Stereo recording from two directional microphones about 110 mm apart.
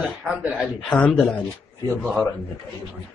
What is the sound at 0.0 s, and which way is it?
Speech, 10° right (ahead or behind).